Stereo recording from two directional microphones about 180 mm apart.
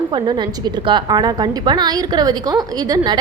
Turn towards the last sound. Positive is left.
turn(degrees=-20)  # may be behind; listen again after turning